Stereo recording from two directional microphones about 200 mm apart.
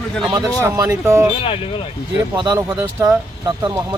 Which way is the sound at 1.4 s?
30° left (ahead or behind).